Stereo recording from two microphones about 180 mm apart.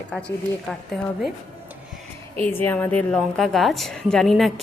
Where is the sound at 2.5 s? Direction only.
10° left (ahead or behind).